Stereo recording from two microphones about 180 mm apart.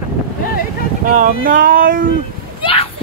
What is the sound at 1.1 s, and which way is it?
Speech, 50° right (ahead or behind).